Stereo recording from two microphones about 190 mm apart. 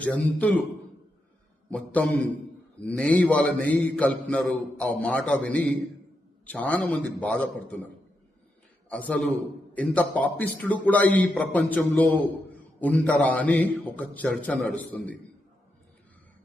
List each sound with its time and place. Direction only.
0.0 s a man's voice: 5° left (ahead or behind)
1.7 s a man's voice: 10° left (ahead or behind)
8.9 s a man's voice: 10° left (ahead or behind)